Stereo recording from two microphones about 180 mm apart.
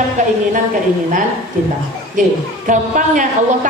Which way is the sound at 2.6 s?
45° right (ahead or behind).